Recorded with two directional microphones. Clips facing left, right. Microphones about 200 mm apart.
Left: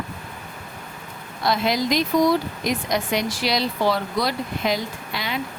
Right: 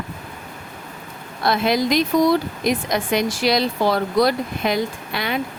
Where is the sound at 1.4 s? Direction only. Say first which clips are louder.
Right 3 dB; 60° right (ahead or behind).